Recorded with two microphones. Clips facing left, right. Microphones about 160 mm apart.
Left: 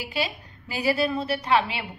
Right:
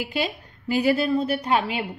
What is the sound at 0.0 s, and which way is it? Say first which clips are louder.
A woman's voice: right 3 dB; 50° right (ahead or behind).